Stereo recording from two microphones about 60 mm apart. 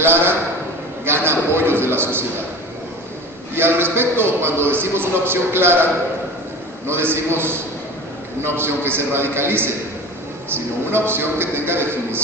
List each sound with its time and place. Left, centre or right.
1.0 s a man's voice: right
3.5 s a man's voice: right
6.9 s a man's voice: right